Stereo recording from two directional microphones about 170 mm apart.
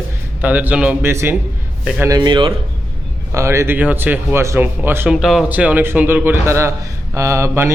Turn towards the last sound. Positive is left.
turn(degrees=-15)  # may be behind; listen again after turning